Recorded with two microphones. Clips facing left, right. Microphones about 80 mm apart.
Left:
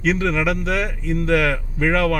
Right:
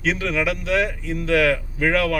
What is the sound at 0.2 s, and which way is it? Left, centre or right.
Speech, left.